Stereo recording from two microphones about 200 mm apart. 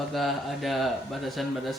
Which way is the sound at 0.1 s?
Centre (ahead or behind).